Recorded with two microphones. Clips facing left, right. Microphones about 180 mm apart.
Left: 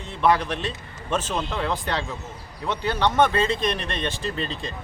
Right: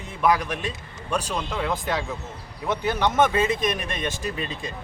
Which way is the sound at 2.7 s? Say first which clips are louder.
Even; 15° right (ahead or behind).